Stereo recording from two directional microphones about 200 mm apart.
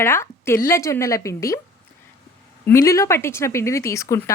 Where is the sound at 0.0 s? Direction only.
10° left (ahead or behind).